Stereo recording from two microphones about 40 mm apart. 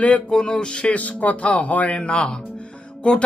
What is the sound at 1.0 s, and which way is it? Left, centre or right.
Speech, left.